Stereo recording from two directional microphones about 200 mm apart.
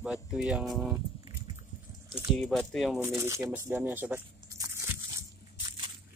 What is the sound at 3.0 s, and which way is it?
Speech, 15° right (ahead or behind).